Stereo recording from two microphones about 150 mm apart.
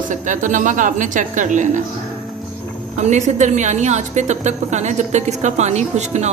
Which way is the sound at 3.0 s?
50° right (ahead or behind).